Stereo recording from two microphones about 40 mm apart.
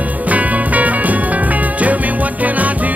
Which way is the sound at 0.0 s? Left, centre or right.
Right.